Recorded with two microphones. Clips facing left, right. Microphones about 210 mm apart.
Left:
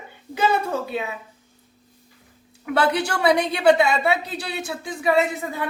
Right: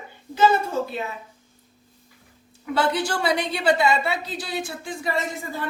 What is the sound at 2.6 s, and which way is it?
A woman's voice, 65° left (ahead or behind).